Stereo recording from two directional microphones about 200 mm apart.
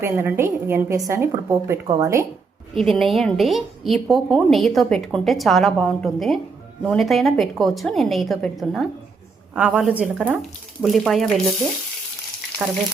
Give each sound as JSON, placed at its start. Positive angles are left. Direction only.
{"t": 0.0, "sound": "a woman's voice", "side_deg": -10}
{"t": 2.7, "sound": "a woman's voice", "side_deg": 0}
{"t": 12.6, "sound": "a woman's voice", "side_deg": -5}